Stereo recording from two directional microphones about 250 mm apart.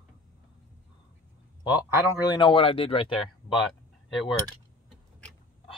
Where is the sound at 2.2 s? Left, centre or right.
Centre.